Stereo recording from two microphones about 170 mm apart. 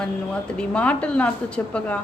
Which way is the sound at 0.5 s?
5° left (ahead or behind).